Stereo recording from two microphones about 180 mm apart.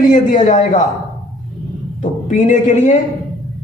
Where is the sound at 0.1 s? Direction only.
45° left (ahead or behind).